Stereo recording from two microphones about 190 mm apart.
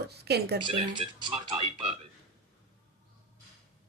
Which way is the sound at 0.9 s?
25° right (ahead or behind).